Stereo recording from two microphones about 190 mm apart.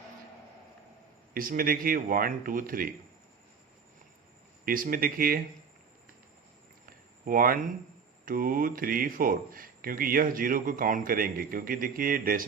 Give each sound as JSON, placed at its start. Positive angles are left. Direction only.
{"t": 1.3, "sound": "speech", "side_deg": -50}
{"t": 4.6, "sound": "speech", "side_deg": -50}
{"t": 7.3, "sound": "speech", "side_deg": -50}